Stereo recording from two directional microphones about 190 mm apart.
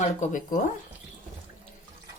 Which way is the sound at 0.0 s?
40° left (ahead or behind).